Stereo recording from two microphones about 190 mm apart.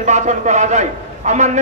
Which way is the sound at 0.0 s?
40° right (ahead or behind).